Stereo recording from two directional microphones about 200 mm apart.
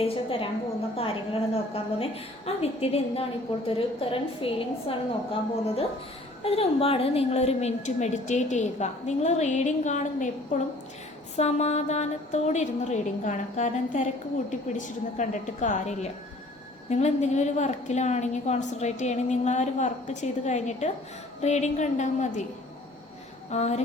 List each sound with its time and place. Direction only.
0.0 s a woman's voice: 25° left (ahead or behind)
23.5 s a woman's voice: 35° left (ahead or behind)